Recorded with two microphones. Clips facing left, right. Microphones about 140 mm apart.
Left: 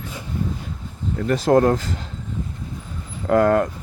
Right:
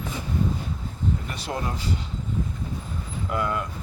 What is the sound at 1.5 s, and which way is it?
Speech, 55° left (ahead or behind).